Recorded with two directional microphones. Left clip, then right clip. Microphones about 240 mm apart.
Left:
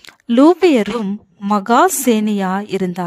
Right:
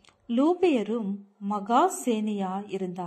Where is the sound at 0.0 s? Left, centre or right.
Left.